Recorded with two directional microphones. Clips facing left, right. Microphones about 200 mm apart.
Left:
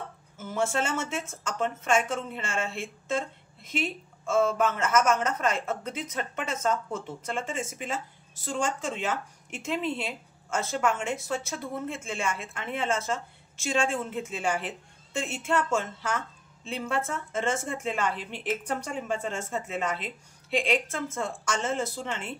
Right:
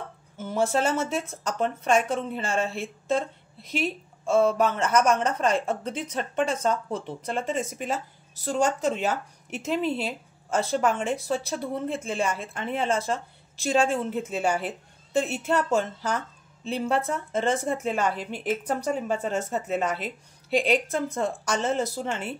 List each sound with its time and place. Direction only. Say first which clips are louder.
0.5 s a woman's voice: right 4 dB; 35° right (ahead or behind)